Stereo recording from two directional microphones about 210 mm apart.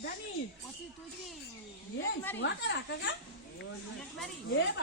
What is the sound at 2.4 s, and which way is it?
Speech, 55° left (ahead or behind).